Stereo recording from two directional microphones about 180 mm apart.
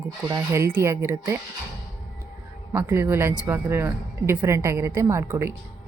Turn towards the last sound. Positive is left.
turn(degrees=-15)  # may be behind; listen again after turning